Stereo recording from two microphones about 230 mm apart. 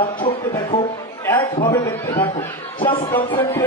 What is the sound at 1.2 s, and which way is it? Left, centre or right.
A man's voice, centre.